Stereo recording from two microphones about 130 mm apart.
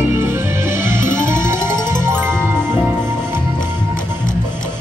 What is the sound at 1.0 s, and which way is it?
Music, 75° left (ahead or behind).